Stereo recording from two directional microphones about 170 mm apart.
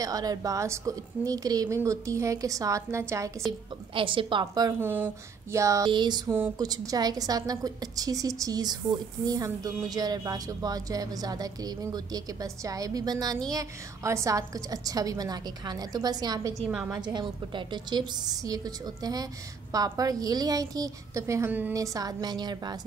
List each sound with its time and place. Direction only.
0.0 s speech: 20° right (ahead or behind)
3.9 s speech: 30° right (ahead or behind)
16.6 s a woman's voice: 5° right (ahead or behind)
17.0 s speech: 25° right (ahead or behind)